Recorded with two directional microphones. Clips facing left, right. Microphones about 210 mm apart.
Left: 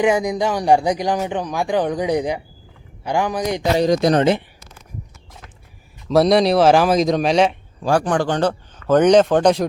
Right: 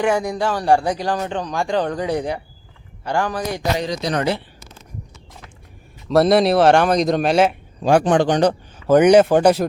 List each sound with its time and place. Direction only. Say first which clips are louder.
0.0 s speech: left 2 dB; 15° left (ahead or behind)
3.8 s speech: left 8 dB; 50° left (ahead or behind)
4.1 s speech: left 5 dB; 20° left (ahead or behind)
6.1 s speech: even; centre (ahead or behind)
7.8 s speech: right 3 dB; 20° right (ahead or behind)